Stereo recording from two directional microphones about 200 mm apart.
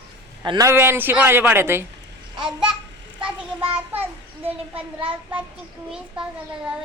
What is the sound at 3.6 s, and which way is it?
Child singing, 25° right (ahead or behind).